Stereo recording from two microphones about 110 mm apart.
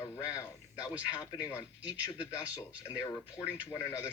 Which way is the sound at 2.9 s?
35° left (ahead or behind).